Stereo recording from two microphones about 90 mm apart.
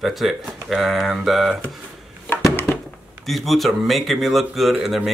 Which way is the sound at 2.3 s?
25° left (ahead or behind).